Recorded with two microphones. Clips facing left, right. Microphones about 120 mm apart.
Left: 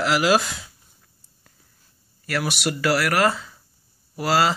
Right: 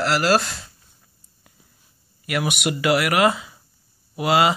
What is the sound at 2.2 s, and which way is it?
Speech, 5° right (ahead or behind).